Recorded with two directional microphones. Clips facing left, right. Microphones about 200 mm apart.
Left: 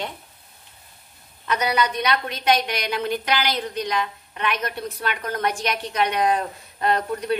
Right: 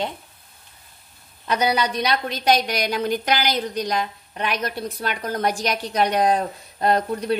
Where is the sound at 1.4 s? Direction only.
30° right (ahead or behind).